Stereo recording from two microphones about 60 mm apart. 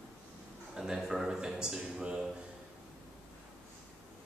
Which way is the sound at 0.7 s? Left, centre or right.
Centre.